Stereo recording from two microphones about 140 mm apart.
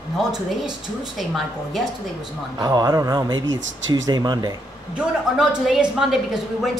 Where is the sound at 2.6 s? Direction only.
25° right (ahead or behind).